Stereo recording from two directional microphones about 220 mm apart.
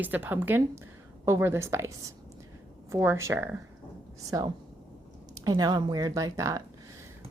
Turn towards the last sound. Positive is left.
turn(degrees=-15)  # may be behind; listen again after turning